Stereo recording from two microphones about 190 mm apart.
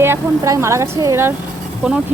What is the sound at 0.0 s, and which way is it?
Speech, 15° right (ahead or behind).